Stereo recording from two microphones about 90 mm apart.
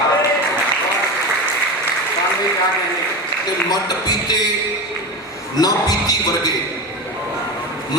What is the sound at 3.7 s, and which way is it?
Speech, 50° left (ahead or behind).